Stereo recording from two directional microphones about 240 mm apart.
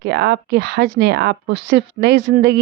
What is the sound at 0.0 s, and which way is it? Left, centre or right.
Speech, right.